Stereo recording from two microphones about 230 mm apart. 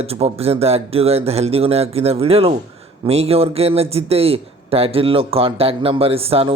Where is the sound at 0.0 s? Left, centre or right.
Right.